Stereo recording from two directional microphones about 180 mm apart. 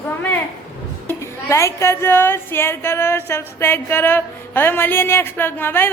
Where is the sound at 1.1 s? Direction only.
15° left (ahead or behind).